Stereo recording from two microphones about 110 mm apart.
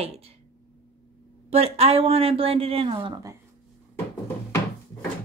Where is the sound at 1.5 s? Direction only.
65° right (ahead or behind).